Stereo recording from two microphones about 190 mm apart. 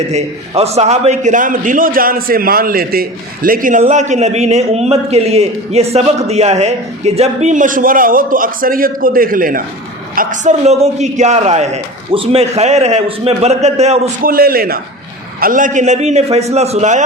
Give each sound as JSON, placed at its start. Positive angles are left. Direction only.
{"t": 0.1, "sound": "a man's voice", "side_deg": -35}
{"t": 14.3, "sound": "a man's voice", "side_deg": -50}